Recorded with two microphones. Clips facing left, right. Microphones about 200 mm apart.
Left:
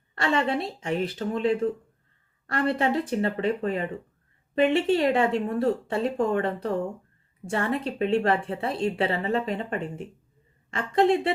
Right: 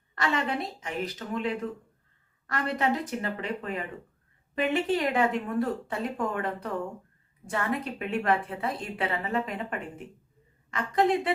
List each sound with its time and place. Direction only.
0.2 s a woman's voice: 30° left (ahead or behind)